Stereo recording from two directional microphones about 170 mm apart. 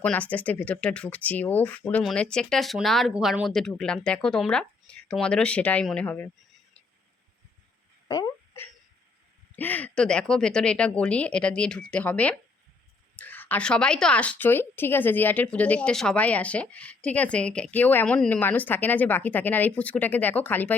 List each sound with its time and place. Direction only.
0.0 s speech: 10° left (ahead or behind)
8.0 s wail: 20° left (ahead or behind)
9.6 s speech: 10° left (ahead or behind)